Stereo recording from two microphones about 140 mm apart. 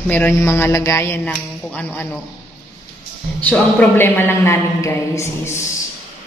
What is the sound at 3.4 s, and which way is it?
A man's voice, 15° left (ahead or behind).